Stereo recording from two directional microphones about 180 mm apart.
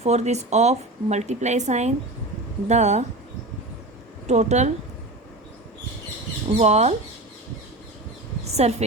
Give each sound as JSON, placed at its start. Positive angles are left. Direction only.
{"t": 0.0, "sound": "speech", "side_deg": -40}
{"t": 4.3, "sound": "speech", "side_deg": -40}
{"t": 6.6, "sound": "speech", "side_deg": -35}
{"t": 8.4, "sound": "a sound", "side_deg": -35}